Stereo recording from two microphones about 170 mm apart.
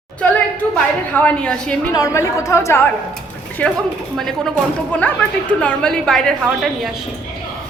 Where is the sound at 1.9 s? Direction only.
20° left (ahead or behind); by 6.9 s centre (ahead or behind).